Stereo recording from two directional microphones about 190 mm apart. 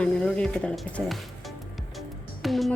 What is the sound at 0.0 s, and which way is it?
Speech, 5° left (ahead or behind).